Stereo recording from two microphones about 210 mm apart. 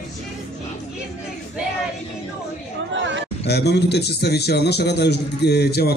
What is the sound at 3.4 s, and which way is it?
A man's voice, 50° left (ahead or behind).